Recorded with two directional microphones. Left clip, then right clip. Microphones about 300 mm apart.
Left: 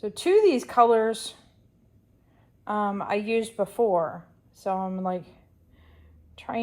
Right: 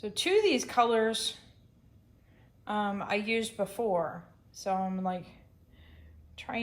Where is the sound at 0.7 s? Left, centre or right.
Centre.